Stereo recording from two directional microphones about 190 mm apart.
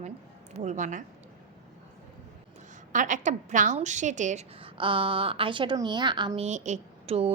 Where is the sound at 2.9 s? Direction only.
40° right (ahead or behind); by 6.4 s 25° right (ahead or behind).